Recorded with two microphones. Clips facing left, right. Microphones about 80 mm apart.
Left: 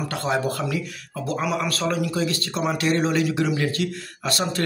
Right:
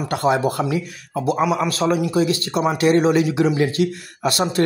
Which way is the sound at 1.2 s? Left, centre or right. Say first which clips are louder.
Right 5 dB; centre.